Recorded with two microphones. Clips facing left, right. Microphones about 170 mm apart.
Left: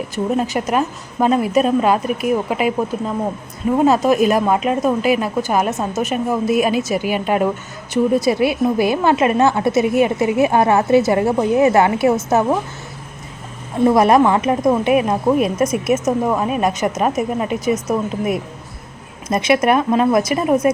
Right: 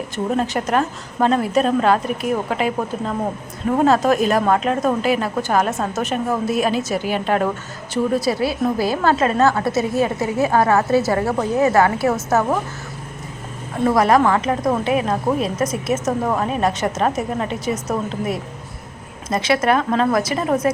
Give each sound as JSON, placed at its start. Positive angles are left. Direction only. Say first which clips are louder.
{"t": 0.3, "sound": "a woman's voice", "louder": "left 1 dB", "side_deg": 10}
{"t": 13.8, "sound": "a woman's voice", "louder": "left 3 dB", "side_deg": 20}